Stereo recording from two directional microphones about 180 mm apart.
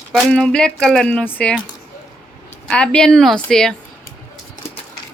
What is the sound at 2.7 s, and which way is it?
Speech, 5° left (ahead or behind).